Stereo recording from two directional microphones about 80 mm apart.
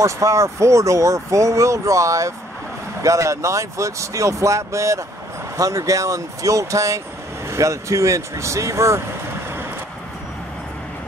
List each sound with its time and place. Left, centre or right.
0.0 s speech: right